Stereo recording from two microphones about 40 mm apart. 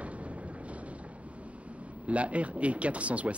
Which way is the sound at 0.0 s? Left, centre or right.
Right.